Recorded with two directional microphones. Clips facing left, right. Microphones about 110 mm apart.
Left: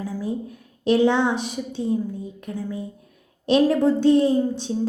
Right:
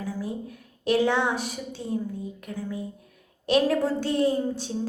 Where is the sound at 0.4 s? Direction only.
25° left (ahead or behind).